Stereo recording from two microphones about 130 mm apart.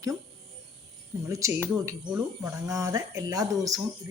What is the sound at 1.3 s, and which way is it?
Speech, 25° right (ahead or behind).